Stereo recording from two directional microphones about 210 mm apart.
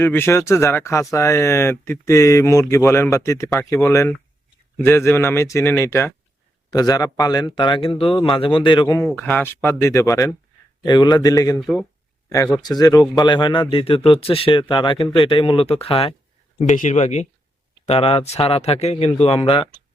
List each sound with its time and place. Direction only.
0.0 s speech: 10° left (ahead or behind)
9.0 s speech: 10° left (ahead or behind)
11.6 s speech: centre (ahead or behind)
12.3 s speech: 15° left (ahead or behind)